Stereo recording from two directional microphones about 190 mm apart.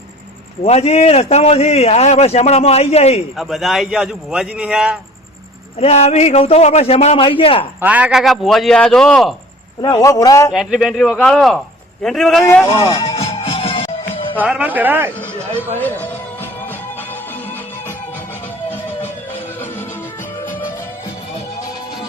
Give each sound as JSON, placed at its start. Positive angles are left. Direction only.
{"t": 0.6, "sound": "a man's voice", "side_deg": 35}
{"t": 3.3, "sound": "a man's voice", "side_deg": 0}
{"t": 5.8, "sound": "a man's voice", "side_deg": 35}
{"t": 7.8, "sound": "a man's voice", "side_deg": -5}
{"t": 9.8, "sound": "a man's voice", "side_deg": 20}
{"t": 10.5, "sound": "a man's voice", "side_deg": 0}
{"t": 13.0, "sound": "music", "side_deg": 30}
{"t": 14.4, "sound": "speech", "side_deg": -5}
{"t": 15.8, "sound": "music", "side_deg": 10}